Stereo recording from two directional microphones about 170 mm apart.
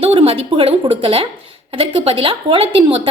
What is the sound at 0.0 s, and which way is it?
A woman's voice, 35° right (ahead or behind).